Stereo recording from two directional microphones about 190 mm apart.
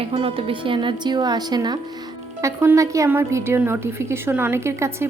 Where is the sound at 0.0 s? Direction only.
30° right (ahead or behind).